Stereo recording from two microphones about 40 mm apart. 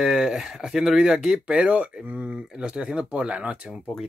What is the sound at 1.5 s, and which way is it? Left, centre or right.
Speech, right.